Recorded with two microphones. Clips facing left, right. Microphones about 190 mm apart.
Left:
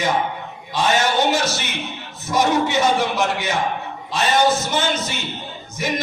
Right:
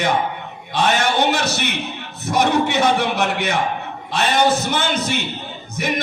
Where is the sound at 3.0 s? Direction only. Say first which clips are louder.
Right 1 dB; 60° right (ahead or behind).